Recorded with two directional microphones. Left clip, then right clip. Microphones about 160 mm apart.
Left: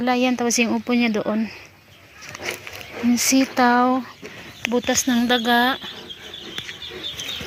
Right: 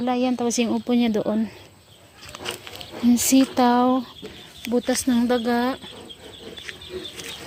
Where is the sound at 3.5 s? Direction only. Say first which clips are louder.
Left 4 dB; 20° right (ahead or behind).